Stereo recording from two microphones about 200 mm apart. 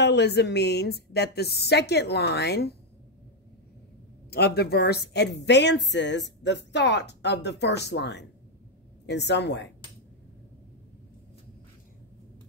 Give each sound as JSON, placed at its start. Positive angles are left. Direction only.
{"t": 0.0, "sound": "a woman's voice", "side_deg": 60}
{"t": 4.3, "sound": "a woman's voice", "side_deg": 55}